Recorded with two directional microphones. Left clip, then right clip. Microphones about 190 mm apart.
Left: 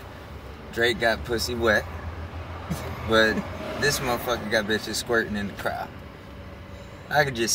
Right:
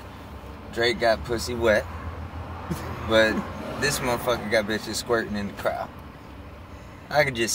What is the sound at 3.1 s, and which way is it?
Speech, 15° right (ahead or behind).